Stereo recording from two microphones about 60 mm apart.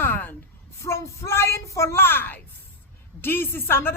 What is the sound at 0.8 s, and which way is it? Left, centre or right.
A woman's voice, left.